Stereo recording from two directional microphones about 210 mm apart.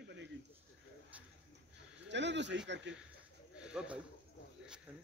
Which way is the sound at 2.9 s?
60° right (ahead or behind).